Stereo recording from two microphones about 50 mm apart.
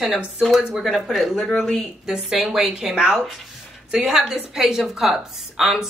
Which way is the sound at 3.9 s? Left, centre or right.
Centre.